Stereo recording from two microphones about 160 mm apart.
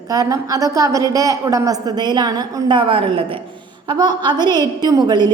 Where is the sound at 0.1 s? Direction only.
20° right (ahead or behind).